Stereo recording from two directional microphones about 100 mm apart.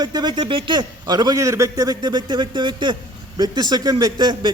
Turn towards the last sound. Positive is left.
turn(degrees=-45)  # may be behind; listen again after turning